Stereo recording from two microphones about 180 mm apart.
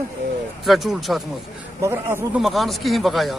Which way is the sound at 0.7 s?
Centre (ahead or behind).